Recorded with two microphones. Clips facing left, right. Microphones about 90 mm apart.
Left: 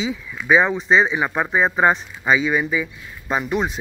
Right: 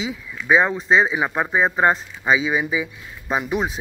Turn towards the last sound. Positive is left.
turn(degrees=-5)  # may be behind; listen again after turning